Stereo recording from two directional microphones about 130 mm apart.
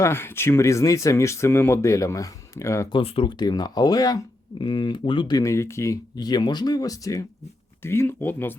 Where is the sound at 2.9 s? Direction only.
45° left (ahead or behind).